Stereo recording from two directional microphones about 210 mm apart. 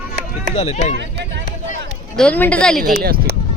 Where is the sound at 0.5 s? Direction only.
35° left (ahead or behind).